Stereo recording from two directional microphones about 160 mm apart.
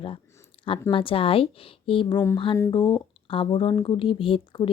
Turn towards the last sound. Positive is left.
turn(degrees=35)  # may be behind; listen again after turning